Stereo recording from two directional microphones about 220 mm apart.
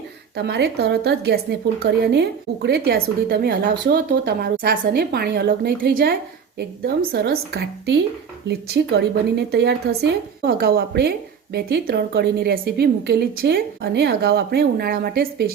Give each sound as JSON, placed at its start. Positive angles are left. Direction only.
{"t": 0.3, "sound": "a woman's voice", "side_deg": -50}